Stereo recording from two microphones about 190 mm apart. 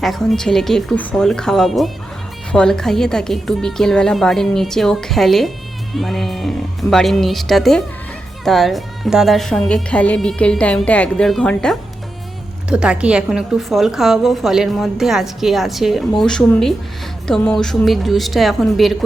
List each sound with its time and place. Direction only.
0.0 s a woman's voice: centre (ahead or behind)